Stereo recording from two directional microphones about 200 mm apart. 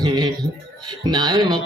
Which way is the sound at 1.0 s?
20° right (ahead or behind).